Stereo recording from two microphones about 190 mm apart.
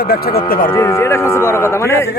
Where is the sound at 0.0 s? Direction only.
55° left (ahead or behind).